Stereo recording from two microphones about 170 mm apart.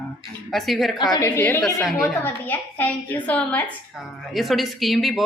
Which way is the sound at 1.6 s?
Centre (ahead or behind).